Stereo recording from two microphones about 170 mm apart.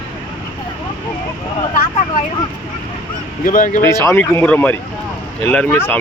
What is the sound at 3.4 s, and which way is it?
Speech, 50° left (ahead or behind).